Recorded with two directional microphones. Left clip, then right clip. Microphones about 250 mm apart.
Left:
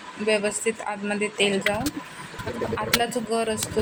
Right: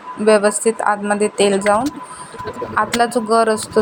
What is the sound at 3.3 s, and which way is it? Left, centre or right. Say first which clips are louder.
Speech: right 13 dB; centre.